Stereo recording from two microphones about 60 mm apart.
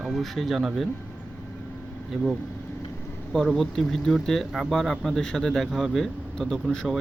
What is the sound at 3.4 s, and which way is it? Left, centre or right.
Speech, centre.